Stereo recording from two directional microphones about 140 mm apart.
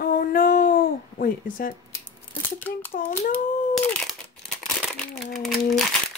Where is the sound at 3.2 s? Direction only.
60° left (ahead or behind).